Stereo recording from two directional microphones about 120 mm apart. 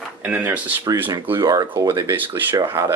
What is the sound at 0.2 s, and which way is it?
Speech, 15° right (ahead or behind).